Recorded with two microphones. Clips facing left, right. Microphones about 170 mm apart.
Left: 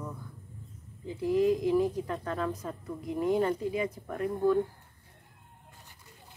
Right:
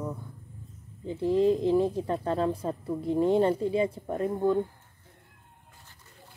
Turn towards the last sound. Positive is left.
turn(degrees=-25)  # may be behind; listen again after turning